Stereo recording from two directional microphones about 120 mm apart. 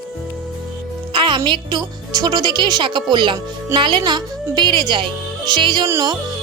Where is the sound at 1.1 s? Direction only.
40° right (ahead or behind).